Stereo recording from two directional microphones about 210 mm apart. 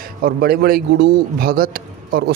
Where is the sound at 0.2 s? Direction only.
45° right (ahead or behind).